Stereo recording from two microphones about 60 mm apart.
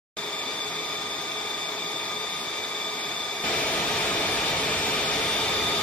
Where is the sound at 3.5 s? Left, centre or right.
Left.